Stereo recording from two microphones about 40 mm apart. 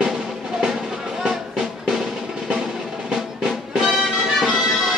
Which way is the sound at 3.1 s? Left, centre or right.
Centre.